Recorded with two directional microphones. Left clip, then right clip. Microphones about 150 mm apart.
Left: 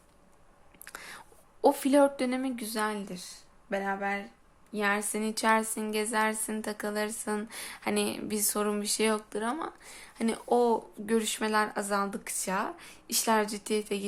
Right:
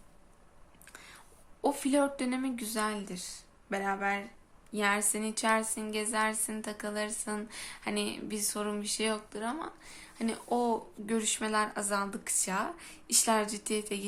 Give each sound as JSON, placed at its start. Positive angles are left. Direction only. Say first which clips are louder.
{"t": 0.9, "sound": "whispering", "louder": "left 7 dB", "side_deg": 40}
{"t": 1.6, "sound": "speech", "louder": "left 6 dB", "side_deg": 25}